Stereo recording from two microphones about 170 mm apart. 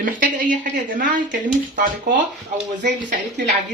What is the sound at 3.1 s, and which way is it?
Speech, 80° right.